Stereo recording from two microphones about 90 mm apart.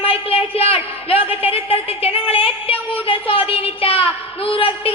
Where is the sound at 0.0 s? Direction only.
90° left.